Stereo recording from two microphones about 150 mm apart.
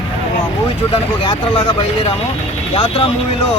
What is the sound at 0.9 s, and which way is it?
Speech, 35° left (ahead or behind).